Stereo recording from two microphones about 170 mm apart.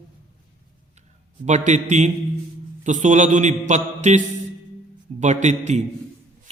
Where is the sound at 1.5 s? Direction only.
45° right (ahead or behind).